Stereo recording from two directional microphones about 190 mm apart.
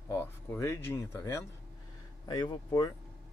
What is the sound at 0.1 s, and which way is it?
Speech, 15° left (ahead or behind).